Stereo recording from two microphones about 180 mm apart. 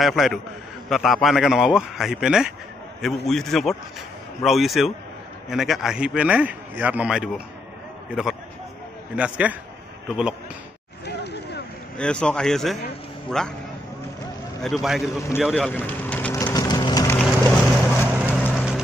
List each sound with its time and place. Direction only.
0.0 s speech: centre (ahead or behind)
11.1 s a sound: 65° left (ahead or behind)
12.0 s speech: 5° left (ahead or behind)
14.6 s speech: centre (ahead or behind)
15.4 s vehicle: 5° left (ahead or behind); by 17.2 s 20° left (ahead or behind)
17.2 s boat: 10° left (ahead or behind)
18.4 s vehicle: centre (ahead or behind)